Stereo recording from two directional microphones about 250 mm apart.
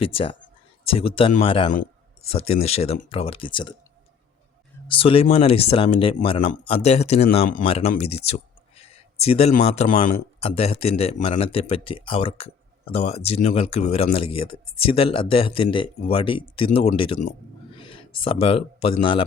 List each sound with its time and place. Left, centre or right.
0.0 s speech: left
4.9 s speech: left
8.3 s a sound: left
9.2 s a man's voice: left